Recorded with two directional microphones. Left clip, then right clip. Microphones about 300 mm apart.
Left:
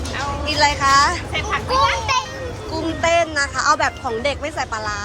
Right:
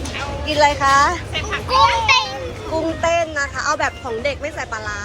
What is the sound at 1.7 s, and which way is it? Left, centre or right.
A child's voice, centre.